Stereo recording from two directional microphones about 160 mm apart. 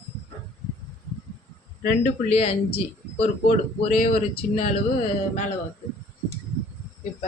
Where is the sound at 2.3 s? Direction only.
40° left (ahead or behind).